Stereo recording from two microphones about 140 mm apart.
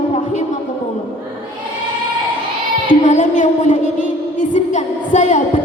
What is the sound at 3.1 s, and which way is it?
A woman's voice, 60° left (ahead or behind).